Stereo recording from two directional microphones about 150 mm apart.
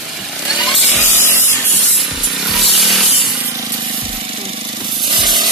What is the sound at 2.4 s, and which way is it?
Chainsaw, centre (ahead or behind).